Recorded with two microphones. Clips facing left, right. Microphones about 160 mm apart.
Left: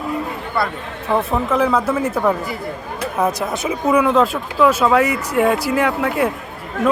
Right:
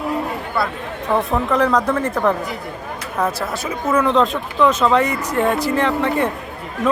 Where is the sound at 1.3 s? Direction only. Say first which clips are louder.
Even; centre (ahead or behind).